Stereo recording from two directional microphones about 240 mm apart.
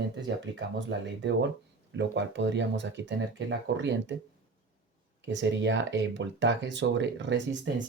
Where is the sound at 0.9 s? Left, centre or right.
Right.